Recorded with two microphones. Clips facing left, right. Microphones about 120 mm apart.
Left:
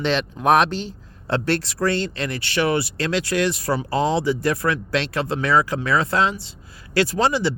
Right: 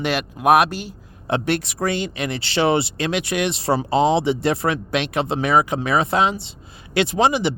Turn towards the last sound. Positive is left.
turn(degrees=-20)  # may be behind; listen again after turning